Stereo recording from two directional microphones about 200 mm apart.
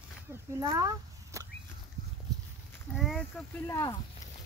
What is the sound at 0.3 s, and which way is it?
Speech, 15° right (ahead or behind).